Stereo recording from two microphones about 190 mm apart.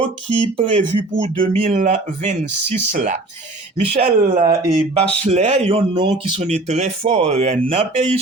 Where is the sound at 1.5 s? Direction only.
40° right (ahead or behind).